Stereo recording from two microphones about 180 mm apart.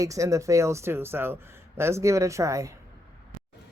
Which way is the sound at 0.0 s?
15° right (ahead or behind).